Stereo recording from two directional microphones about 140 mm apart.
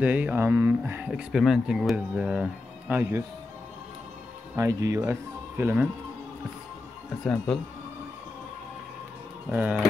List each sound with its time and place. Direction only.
0.0 s speech: 10° right (ahead or behind)
4.6 s speech: 20° right (ahead or behind)
9.5 s speech: 15° right (ahead or behind)